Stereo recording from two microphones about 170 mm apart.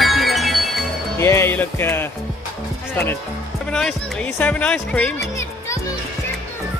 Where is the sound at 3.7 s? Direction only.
5° left (ahead or behind).